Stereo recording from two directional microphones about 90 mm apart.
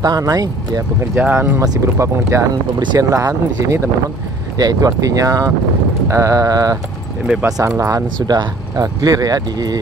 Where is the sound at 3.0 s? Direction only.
40° right (ahead or behind).